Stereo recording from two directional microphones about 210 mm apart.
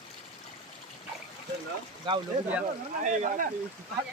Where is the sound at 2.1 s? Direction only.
20° right (ahead or behind).